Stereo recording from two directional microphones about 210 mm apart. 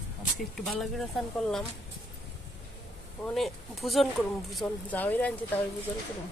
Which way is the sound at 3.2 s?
Centre (ahead or behind).